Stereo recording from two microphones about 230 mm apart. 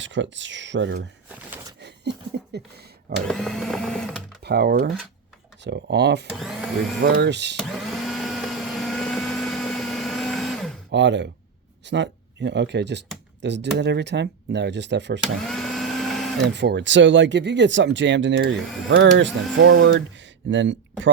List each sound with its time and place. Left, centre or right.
0.0 s speech: right
1.8 s a sound: right
3.2 s sewing machine: centre
4.4 s speech: right
6.3 s speech: centre
7.0 s speech: right
7.6 s blender: centre
10.9 s speech: right
15.2 s vacuum cleaner: centre
16.5 s speech: right